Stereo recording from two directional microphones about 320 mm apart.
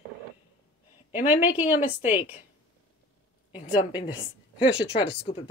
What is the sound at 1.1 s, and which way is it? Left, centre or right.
Speech, centre.